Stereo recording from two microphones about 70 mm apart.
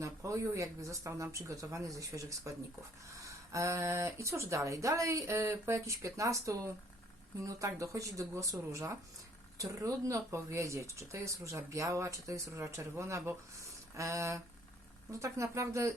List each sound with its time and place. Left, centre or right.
0.0 s speech: right